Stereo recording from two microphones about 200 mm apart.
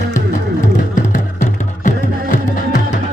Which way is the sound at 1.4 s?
40° left (ahead or behind).